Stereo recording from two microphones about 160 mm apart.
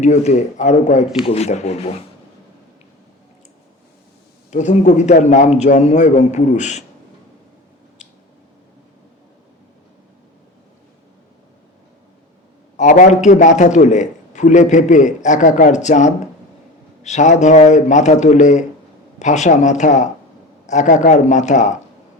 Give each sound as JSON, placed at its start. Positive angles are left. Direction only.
{"t": 0.0, "sound": "a man's voice", "side_deg": 45}
{"t": 4.5, "sound": "a man's voice", "side_deg": 50}
{"t": 12.7, "sound": "a man's voice", "side_deg": 50}